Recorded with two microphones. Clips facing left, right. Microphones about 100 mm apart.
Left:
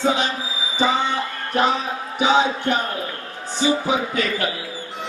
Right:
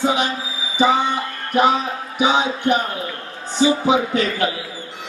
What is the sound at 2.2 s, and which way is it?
A man's voice, 15° right (ahead or behind).